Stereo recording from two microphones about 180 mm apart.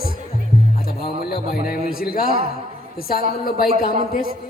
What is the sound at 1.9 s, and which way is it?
Speech, 55° left (ahead or behind).